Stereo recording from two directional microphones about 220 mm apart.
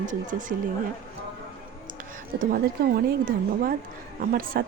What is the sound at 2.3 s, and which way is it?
Speech, 40° right (ahead or behind).